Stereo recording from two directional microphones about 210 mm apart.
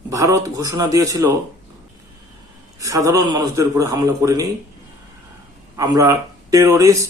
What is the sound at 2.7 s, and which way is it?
A man's voice, 15° right (ahead or behind).